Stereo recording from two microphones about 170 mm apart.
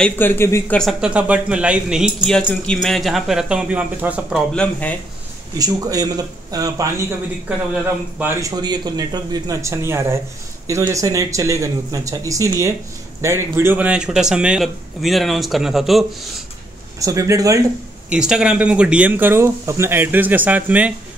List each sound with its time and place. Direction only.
0.0 s speech: 15° left (ahead or behind)
0.7 s speech: centre (ahead or behind)
4.6 s speech: 10° left (ahead or behind)
5.6 s speech: 20° right (ahead or behind)
8.2 s speech: 15° right (ahead or behind)
17.0 s speech: 20° right (ahead or behind)
18.1 s speech: 5° right (ahead or behind)